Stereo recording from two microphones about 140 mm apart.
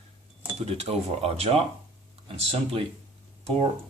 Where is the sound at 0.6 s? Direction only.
45° right (ahead or behind).